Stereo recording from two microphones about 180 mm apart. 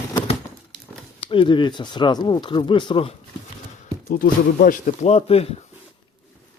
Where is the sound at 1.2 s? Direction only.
30° left (ahead or behind).